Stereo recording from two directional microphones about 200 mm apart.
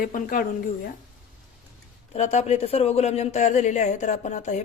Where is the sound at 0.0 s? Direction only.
45° left (ahead or behind).